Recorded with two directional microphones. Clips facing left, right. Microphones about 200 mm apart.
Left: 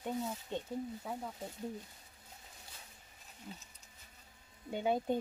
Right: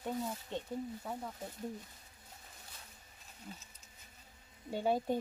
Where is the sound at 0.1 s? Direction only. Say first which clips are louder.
Left 1 dB; 5° left (ahead or behind).